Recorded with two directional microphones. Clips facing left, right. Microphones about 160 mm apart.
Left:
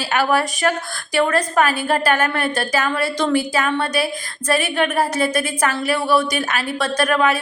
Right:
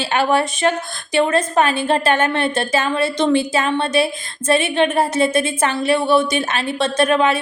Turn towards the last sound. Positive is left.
turn(degrees=-25)  # may be behind; listen again after turning